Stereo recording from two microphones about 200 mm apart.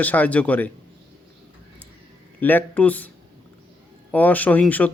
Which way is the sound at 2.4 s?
10° left (ahead or behind).